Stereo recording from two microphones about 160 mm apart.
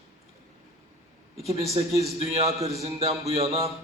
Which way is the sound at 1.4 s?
40° right (ahead or behind).